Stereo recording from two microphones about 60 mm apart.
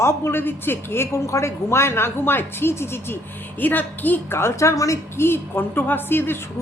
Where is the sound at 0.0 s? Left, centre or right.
Left.